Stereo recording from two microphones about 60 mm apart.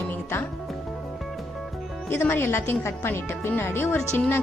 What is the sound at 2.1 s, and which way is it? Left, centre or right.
Speech, left.